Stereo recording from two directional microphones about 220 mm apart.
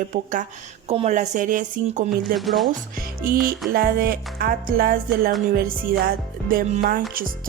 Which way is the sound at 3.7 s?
40° right (ahead or behind).